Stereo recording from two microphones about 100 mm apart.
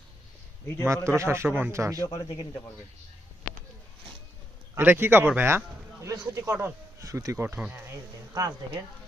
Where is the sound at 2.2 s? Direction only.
50° left (ahead or behind).